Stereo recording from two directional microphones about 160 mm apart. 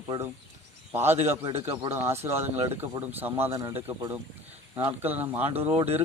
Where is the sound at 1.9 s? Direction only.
15° right (ahead or behind).